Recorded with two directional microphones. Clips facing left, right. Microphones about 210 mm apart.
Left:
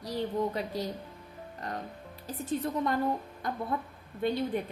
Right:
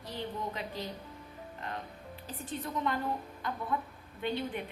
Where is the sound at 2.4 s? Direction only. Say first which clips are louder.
Left 5 dB; 40° left (ahead or behind).